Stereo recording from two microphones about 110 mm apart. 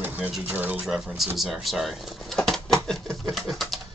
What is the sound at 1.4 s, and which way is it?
Pigeon, centre (ahead or behind).